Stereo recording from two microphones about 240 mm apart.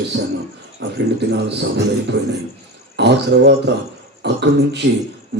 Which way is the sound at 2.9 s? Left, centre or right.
Right.